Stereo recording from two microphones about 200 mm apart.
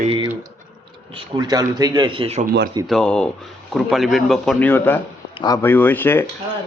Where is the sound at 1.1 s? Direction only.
20° right (ahead or behind).